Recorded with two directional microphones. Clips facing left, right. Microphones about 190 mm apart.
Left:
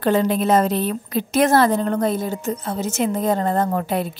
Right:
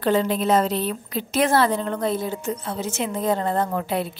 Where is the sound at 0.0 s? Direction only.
50° left (ahead or behind).